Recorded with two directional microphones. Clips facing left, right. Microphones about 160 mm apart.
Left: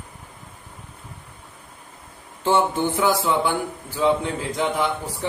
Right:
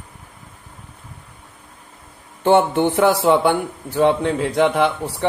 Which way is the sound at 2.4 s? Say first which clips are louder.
Right 5 dB; 60° right (ahead or behind).